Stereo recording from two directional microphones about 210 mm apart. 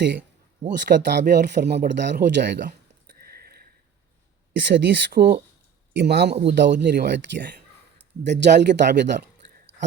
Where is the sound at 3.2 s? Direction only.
45° right (ahead or behind).